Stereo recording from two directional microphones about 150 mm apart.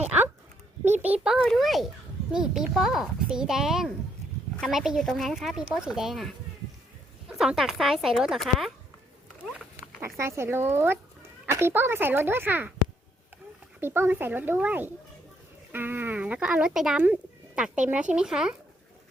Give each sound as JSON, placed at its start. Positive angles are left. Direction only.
{"t": 1.0, "sound": "speech", "side_deg": -10}
{"t": 7.3, "sound": "speech", "side_deg": -5}
{"t": 10.0, "sound": "speech", "side_deg": -20}
{"t": 13.7, "sound": "speech", "side_deg": -15}